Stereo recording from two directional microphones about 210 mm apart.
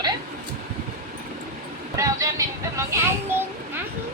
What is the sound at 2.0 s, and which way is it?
Vehicle, 15° right (ahead or behind).